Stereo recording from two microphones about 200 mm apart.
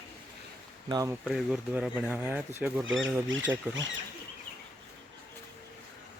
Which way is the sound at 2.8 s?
70° right (ahead or behind).